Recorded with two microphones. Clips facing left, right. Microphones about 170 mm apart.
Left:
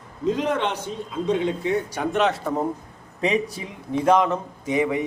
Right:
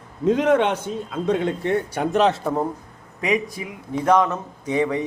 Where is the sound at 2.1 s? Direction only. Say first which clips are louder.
Right 3 dB; 35° right (ahead or behind).